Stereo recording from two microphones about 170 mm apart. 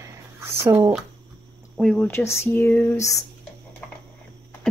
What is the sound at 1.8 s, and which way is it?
Speech, 5° left (ahead or behind).